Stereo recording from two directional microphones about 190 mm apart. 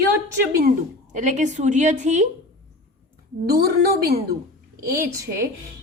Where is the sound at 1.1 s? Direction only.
40° right (ahead or behind).